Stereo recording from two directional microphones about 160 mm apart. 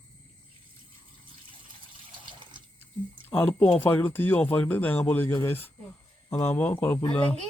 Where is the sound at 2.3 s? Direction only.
30° right (ahead or behind).